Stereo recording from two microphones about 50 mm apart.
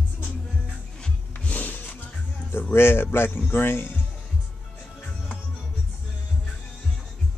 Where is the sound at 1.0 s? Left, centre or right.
Left.